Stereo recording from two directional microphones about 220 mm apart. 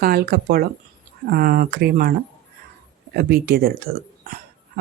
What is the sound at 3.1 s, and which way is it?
Speech, 45° right (ahead or behind).